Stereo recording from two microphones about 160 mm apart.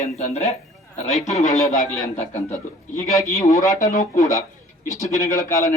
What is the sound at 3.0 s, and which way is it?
A man's voice, 20° left (ahead or behind).